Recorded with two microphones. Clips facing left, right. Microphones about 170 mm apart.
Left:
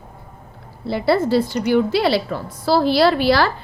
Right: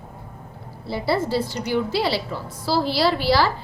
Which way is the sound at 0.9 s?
65° left (ahead or behind).